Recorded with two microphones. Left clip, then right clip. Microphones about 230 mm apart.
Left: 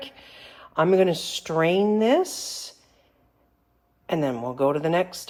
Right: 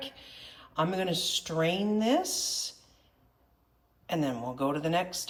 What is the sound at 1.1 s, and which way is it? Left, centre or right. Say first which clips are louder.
Speech: left 4 dB; left.